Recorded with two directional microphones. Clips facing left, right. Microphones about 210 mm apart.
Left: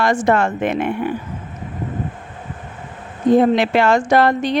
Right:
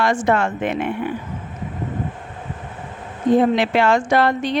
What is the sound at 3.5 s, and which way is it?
A woman's voice, 45° left (ahead or behind).